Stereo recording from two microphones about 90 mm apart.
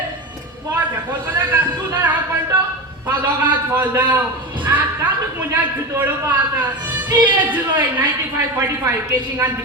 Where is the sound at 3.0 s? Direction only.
20° right (ahead or behind).